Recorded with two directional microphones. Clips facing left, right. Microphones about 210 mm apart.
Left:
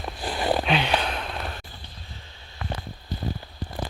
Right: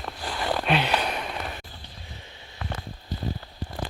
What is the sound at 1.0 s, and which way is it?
Sigh, 10° right (ahead or behind).